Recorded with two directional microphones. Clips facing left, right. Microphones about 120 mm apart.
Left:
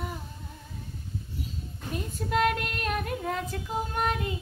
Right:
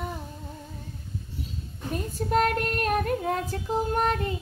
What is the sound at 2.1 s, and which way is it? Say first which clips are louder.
Child singing: right 2 dB; 40° right (ahead or behind).